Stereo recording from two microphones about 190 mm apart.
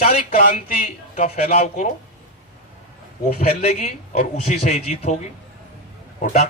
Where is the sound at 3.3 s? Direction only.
35° left (ahead or behind).